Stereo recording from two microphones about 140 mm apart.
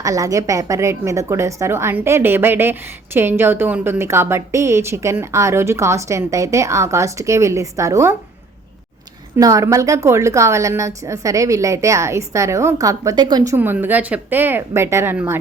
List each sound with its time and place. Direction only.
0.0 s a woman's voice: 25° right (ahead or behind)
9.4 s a woman's voice: 25° right (ahead or behind)
13.6 s speech: 15° right (ahead or behind)